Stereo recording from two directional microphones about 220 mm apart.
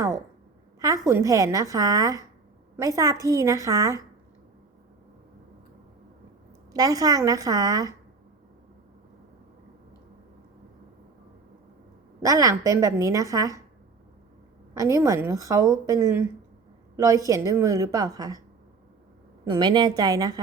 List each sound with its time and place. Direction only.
0.8 s a woman's voice: 15° right (ahead or behind)
6.7 s a woman's voice: 15° right (ahead or behind)
12.2 s a woman's voice: 15° right (ahead or behind)
14.7 s a woman's voice: 15° right (ahead or behind)
19.5 s a woman's voice: 20° right (ahead or behind)